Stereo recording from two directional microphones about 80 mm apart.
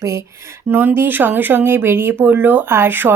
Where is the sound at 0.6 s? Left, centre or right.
Right.